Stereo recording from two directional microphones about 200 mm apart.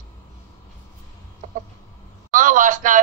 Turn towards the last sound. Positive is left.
turn(degrees=-40)  # may be behind; listen again after turning